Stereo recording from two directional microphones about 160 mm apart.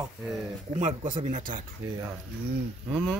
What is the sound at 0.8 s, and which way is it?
Speech, 45° right (ahead or behind).